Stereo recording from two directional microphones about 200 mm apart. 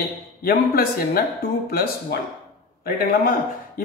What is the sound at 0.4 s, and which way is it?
Speech, 50° left (ahead or behind).